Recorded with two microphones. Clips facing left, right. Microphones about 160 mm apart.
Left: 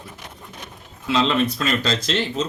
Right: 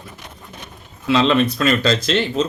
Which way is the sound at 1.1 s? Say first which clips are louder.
Right 4 dB; 70° right (ahead or behind).